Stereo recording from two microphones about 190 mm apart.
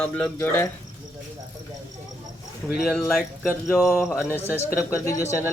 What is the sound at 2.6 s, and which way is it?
Speech, centre (ahead or behind).